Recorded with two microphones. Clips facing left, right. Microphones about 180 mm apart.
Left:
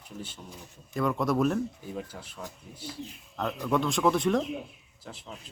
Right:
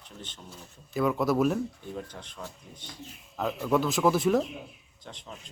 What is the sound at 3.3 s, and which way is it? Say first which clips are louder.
Speech: right 2 dB; 5° right (ahead or behind).